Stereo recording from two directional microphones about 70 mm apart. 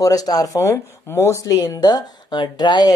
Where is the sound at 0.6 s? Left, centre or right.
Left.